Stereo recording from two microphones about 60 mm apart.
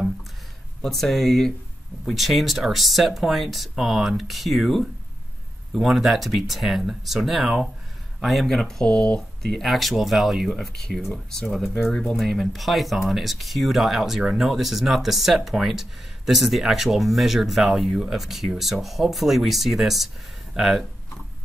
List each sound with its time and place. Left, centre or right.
0.8 s speech: centre
8.8 s speech: centre
9.4 s speech: centre
11.4 s speech: centre
11.8 s speech: centre